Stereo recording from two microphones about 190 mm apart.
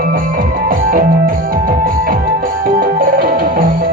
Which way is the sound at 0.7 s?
50° right (ahead or behind).